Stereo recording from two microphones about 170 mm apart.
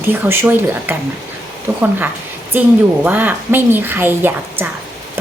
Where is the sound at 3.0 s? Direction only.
10° right (ahead or behind).